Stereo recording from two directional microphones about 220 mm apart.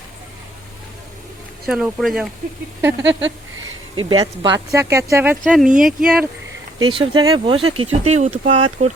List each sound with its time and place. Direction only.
1.6 s speech: centre (ahead or behind)
3.0 s a sound: 55° right (ahead or behind)
4.4 s speech: 15° right (ahead or behind)
6.7 s speech: 20° right (ahead or behind)